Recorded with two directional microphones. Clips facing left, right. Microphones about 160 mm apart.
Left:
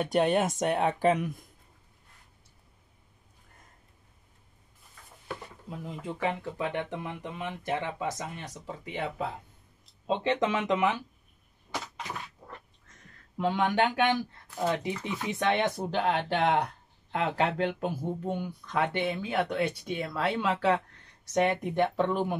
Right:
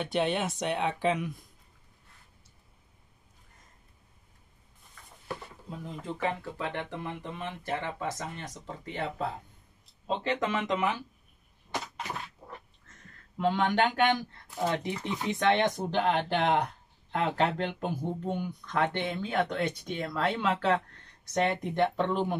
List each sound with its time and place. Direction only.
0.0 s speech: 45° left (ahead or behind)
6.2 s speech: 15° left (ahead or behind)
13.4 s speech: 10° left (ahead or behind)